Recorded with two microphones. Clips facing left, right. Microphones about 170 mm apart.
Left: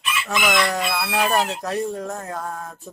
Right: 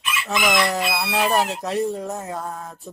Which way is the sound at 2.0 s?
5° right (ahead or behind).